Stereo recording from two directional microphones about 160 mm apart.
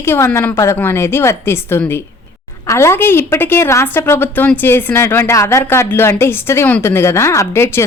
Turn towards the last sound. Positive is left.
turn(degrees=15)  # may be behind; listen again after turning